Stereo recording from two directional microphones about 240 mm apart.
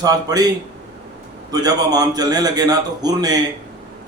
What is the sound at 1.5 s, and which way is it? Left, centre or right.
A man's voice, centre.